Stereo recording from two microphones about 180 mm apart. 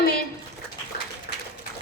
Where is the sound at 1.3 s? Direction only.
55° left (ahead or behind).